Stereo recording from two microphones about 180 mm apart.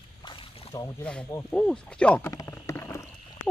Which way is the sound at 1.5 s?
5° left (ahead or behind).